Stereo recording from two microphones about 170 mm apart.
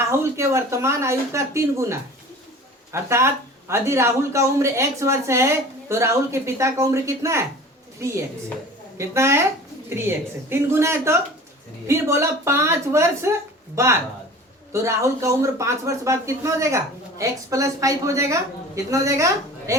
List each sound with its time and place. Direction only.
0.1 s speech: 15° right (ahead or behind)
9.0 s a woman's voice: 15° right (ahead or behind)